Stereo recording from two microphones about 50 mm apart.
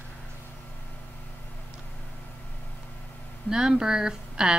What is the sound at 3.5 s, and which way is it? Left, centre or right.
A woman's voice, centre.